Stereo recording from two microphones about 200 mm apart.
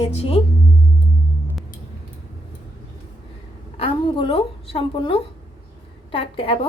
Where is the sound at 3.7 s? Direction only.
25° left (ahead or behind).